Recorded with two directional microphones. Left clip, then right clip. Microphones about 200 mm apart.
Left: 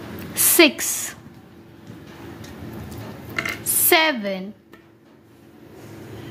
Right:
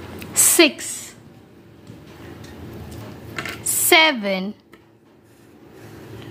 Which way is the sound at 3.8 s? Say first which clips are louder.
Right 3 dB; 10° right (ahead or behind).